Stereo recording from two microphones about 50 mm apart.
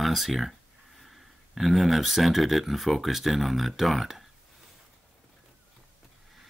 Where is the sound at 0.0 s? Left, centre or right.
Centre.